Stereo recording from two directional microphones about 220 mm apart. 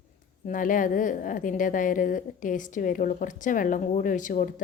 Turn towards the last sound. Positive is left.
turn(degrees=35)  # may be behind; listen again after turning